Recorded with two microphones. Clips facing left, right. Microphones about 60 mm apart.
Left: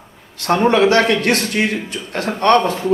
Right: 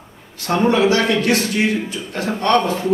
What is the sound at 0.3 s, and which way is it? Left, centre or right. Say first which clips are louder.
A man's voice: left 2 dB; left.